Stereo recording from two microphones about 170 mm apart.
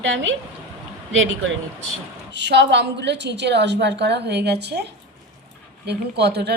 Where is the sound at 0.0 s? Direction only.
90° right.